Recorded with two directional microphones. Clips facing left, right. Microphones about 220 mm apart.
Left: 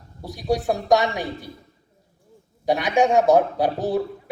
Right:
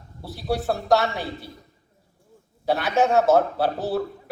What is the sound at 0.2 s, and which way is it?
A man's voice, 15° left (ahead or behind).